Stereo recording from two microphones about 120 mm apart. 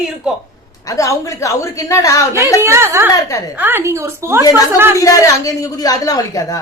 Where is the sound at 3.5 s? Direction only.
15° right (ahead or behind).